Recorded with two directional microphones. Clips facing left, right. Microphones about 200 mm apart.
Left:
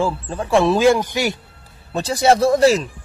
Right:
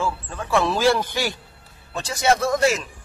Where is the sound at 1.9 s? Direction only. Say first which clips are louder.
Left 5 dB; 35° left (ahead or behind).